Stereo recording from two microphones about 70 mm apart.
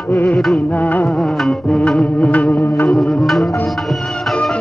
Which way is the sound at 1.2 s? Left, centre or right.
Centre.